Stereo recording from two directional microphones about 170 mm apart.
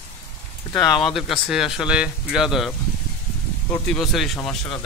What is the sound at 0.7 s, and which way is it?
Speech, 25° left (ahead or behind).